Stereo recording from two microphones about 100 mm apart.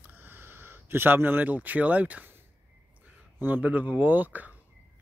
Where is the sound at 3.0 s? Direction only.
20° right (ahead or behind).